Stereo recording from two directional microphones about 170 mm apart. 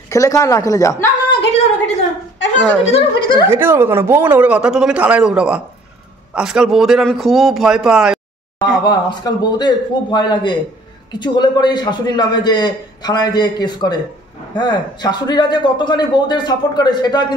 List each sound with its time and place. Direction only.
0.1 s a man's voice: 20° left (ahead or behind)
2.8 s a man's voice: 35° left (ahead or behind)
3.4 s a man's voice: 15° right (ahead or behind); by 8.8 s 5° left (ahead or behind)
8.8 s a man's voice: 25° left (ahead or behind)